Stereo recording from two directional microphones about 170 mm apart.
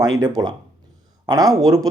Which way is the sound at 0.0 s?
25° right (ahead or behind).